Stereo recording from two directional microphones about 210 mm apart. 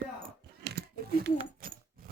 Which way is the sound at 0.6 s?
50° right (ahead or behind).